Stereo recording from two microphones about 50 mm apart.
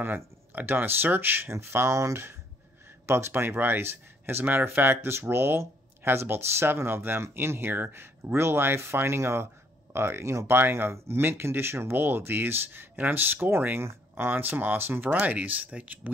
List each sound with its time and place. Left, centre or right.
0.0 s speech: right
1.5 s speech: right
1.9 s speech: right
3.1 s speech: right
3.4 s speech: right
5.6 s a sound: right
6.2 s speech: right
12.9 s speech: right